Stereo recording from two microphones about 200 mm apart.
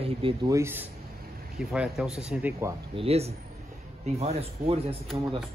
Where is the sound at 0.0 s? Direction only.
25° right (ahead or behind).